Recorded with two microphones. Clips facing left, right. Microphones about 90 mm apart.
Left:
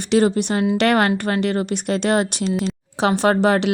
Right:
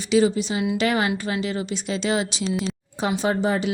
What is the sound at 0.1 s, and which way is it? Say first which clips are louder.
A woman's voice: left 3 dB; 60° left (ahead or behind).